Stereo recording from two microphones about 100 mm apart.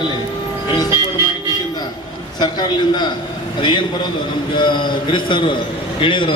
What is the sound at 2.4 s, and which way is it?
A man's voice, 45° left (ahead or behind).